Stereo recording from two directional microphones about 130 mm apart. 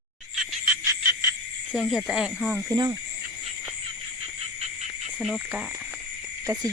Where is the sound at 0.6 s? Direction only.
15° right (ahead or behind).